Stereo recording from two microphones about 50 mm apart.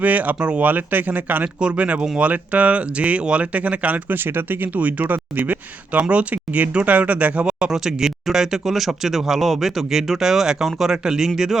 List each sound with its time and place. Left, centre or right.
0.0 s speech: right
4.1 s speech: right
7.4 s speech: centre